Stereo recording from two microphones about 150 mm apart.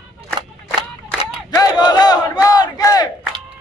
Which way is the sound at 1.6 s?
25° left (ahead or behind).